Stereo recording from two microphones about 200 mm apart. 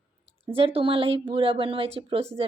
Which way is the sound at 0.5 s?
30° right (ahead or behind).